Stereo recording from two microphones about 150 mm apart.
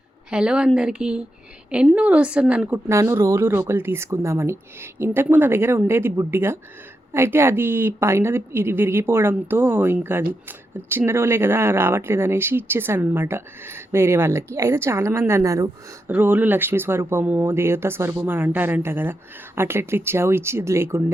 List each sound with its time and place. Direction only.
0.3 s speech: 5° right (ahead or behind)